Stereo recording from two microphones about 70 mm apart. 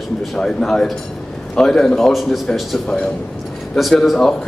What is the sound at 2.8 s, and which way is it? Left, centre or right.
A man's voice, centre.